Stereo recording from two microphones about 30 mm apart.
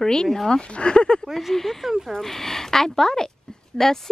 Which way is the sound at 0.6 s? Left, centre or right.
Left.